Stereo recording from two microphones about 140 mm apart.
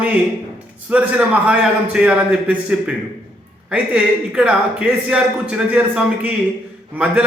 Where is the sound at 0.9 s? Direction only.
10° right (ahead or behind).